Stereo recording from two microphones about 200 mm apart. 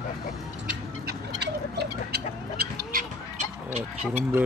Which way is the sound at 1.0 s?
55° right (ahead or behind).